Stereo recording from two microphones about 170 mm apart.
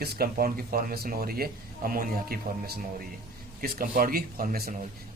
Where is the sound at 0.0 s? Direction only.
60° right (ahead or behind).